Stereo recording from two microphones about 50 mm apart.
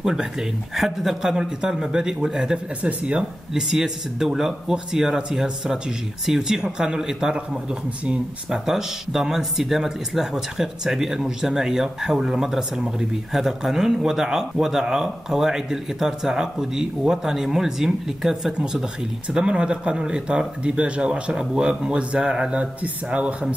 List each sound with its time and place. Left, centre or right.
0.0 s speech: centre
2.8 s speech: right
8.5 s speech: centre
19.3 s speech: right